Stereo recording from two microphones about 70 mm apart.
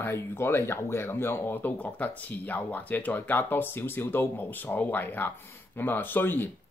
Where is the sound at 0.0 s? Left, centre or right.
Left.